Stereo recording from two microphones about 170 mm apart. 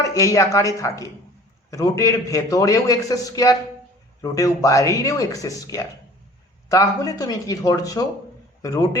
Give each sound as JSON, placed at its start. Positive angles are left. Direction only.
{"t": 0.0, "sound": "a man's voice", "side_deg": 20}